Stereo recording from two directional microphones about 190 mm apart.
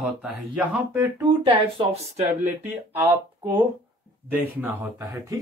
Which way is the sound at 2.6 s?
10° right (ahead or behind).